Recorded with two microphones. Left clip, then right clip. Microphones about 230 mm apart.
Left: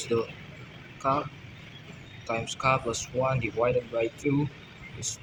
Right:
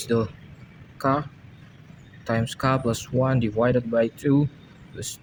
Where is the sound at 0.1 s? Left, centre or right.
Right.